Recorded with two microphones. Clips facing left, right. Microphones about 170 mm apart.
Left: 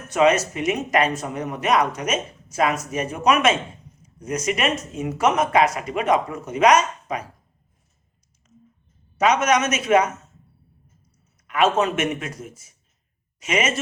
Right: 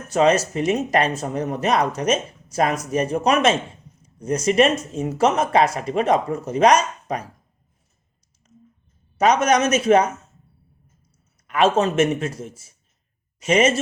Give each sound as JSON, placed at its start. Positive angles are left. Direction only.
{"t": 0.1, "sound": "speech", "side_deg": -30}
{"t": 9.1, "sound": "speech", "side_deg": -35}
{"t": 11.4, "sound": "speech", "side_deg": -35}